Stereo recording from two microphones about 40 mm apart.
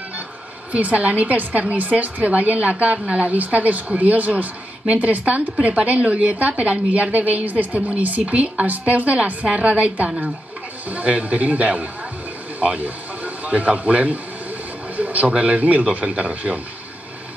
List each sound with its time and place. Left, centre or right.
0.7 s a woman's voice: right